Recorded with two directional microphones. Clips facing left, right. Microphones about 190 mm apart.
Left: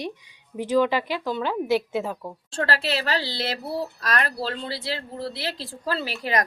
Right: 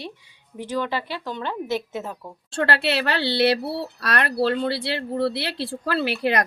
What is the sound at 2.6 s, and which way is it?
A woman's voice, 65° right (ahead or behind).